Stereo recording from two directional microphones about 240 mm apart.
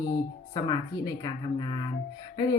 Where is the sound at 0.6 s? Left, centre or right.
Centre.